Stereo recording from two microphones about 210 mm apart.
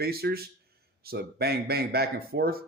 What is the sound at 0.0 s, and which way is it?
Speech, 50° right (ahead or behind).